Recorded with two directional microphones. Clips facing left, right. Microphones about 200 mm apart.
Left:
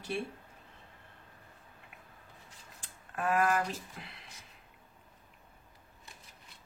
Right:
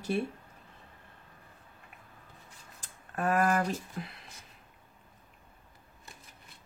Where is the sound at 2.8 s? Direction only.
45° right (ahead or behind).